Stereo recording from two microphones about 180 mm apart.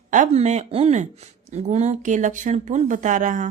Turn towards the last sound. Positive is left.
turn(degrees=-45)  # may be behind; listen again after turning